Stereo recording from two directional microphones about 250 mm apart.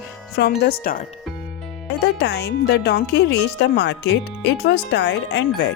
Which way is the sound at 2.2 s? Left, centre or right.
Left.